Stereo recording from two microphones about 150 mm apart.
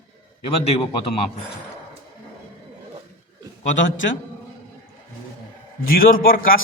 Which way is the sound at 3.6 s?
60° left (ahead or behind).